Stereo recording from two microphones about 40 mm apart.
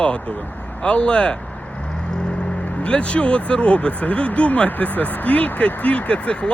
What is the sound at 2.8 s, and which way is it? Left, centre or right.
Speech, left.